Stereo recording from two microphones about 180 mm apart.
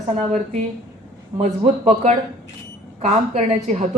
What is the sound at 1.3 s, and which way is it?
A woman's voice, 35° right (ahead or behind).